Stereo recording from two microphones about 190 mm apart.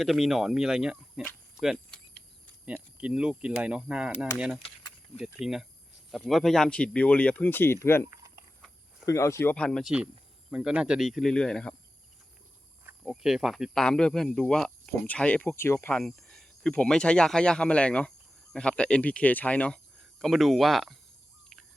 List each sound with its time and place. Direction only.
0.0 s speech: centre (ahead or behind)
1.2 s cricket: centre (ahead or behind)
2.6 s speech: 5° right (ahead or behind)
4.6 s a sound: 25° left (ahead or behind)
5.2 s speech: 5° right (ahead or behind); by 8.0 s 10° left (ahead or behind)
8.1 s a sound: 15° right (ahead or behind)
9.0 s speech: 15° left (ahead or behind)
13.0 s speech: centre (ahead or behind)